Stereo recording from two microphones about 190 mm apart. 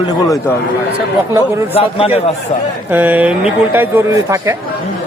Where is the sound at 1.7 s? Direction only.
30° left (ahead or behind).